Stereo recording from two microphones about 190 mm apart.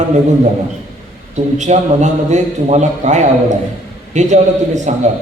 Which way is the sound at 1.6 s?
40° right (ahead or behind).